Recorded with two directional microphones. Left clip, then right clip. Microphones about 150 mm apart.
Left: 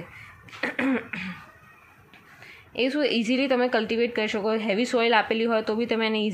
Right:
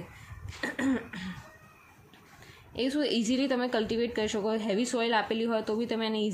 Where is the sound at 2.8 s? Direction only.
10° left (ahead or behind).